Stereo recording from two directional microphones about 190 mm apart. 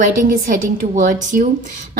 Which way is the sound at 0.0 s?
45° right (ahead or behind).